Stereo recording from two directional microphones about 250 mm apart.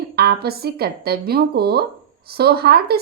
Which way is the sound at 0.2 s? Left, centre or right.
Right.